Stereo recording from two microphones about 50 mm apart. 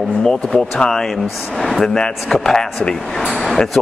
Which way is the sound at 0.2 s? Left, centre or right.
Centre.